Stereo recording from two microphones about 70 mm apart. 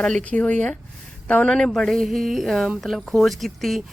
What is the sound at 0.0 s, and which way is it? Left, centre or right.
Speech, centre.